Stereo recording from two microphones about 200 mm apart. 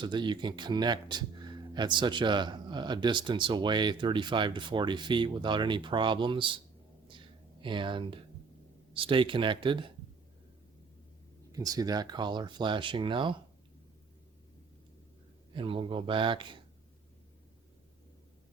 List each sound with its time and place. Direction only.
0.0 s speech: 25° right (ahead or behind)
7.1 s a sound: 25° right (ahead or behind)
8.9 s speech: 25° right (ahead or behind)
11.5 s speech: 20° right (ahead or behind)
15.5 s speech: 25° right (ahead or behind)